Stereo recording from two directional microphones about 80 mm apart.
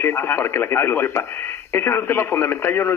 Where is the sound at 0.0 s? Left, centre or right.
Left.